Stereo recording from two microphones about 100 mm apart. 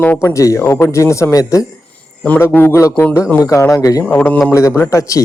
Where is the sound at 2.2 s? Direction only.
15° left (ahead or behind); by 4.0 s 30° left (ahead or behind).